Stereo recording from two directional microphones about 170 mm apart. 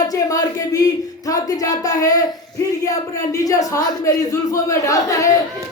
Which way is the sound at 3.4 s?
20° left (ahead or behind).